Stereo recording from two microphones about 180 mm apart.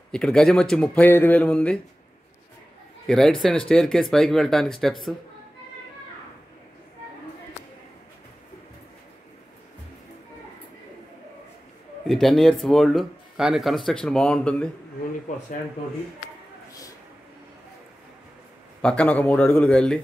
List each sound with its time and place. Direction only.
0.1 s speech: 5° left (ahead or behind)
3.1 s speech: 5° left (ahead or behind)
12.1 s speech: centre (ahead or behind)
15.3 s speech: 40° left (ahead or behind)
18.8 s a man's voice: 5° left (ahead or behind)